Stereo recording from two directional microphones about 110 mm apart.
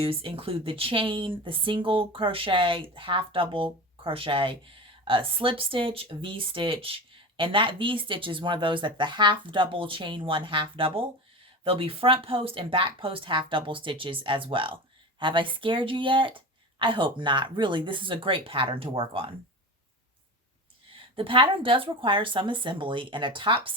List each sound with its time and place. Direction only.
0.0 s speech: 55° right (ahead or behind)
21.2 s speech: 50° right (ahead or behind)